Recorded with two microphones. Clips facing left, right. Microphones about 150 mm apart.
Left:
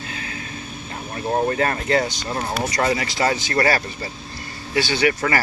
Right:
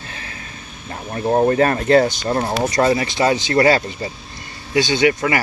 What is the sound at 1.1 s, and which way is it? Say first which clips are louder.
Speech: right 6 dB; 30° right (ahead or behind).